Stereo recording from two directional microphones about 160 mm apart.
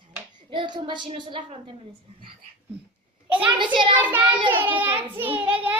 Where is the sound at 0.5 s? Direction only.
30° right (ahead or behind).